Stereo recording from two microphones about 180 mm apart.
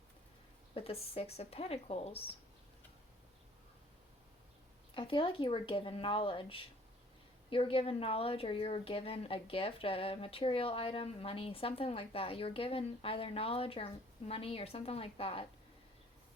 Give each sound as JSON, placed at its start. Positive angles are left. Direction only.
{"t": 0.7, "sound": "speech", "side_deg": 30}
{"t": 4.9, "sound": "speech", "side_deg": 30}